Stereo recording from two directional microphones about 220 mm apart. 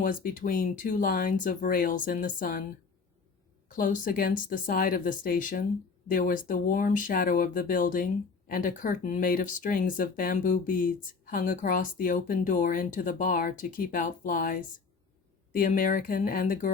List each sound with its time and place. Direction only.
0.0 s speech: 40° left (ahead or behind)
3.7 s speech: 35° left (ahead or behind)